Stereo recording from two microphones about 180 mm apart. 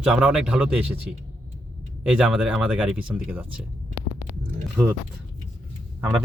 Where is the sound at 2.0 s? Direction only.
5° right (ahead or behind).